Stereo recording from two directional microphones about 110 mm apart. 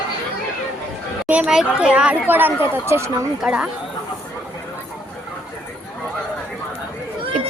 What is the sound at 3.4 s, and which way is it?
Speech, 5° right (ahead or behind).